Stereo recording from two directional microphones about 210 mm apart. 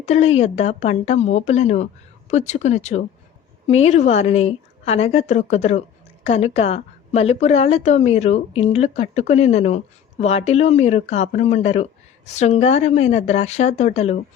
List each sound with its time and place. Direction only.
0.0 s a woman's voice: 30° left (ahead or behind)